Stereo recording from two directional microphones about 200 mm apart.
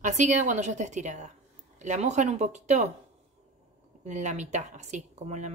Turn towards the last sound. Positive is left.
turn(degrees=-35)  # may be behind; listen again after turning